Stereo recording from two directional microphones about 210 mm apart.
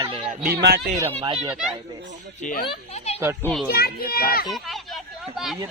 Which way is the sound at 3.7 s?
45° left (ahead or behind).